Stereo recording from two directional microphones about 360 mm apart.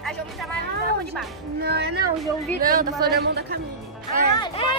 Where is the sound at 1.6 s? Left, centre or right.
Right.